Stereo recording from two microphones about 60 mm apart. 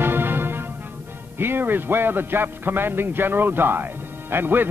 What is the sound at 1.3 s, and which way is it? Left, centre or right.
A man's voice, right.